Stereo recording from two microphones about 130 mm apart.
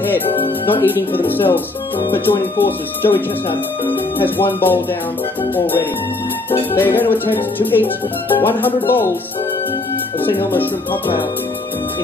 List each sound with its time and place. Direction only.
0.7 s speech: 15° left (ahead or behind)
6.7 s speech: 15° left (ahead or behind)
10.3 s speech: 15° left (ahead or behind)